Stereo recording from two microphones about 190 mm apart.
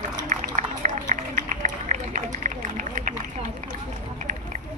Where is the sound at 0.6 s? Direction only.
40° right (ahead or behind).